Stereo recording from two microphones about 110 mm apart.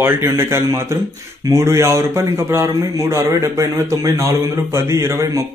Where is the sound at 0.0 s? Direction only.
25° right (ahead or behind).